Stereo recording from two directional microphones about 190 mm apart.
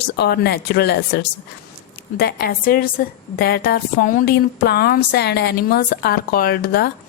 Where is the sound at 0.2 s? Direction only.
60° left (ahead or behind).